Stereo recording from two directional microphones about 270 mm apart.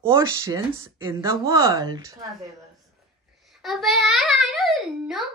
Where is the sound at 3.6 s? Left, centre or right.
Centre.